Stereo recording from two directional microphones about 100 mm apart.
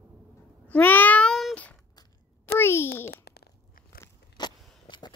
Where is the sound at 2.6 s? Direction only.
25° left (ahead or behind).